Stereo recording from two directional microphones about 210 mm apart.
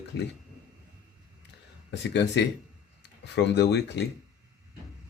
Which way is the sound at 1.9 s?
55° left (ahead or behind).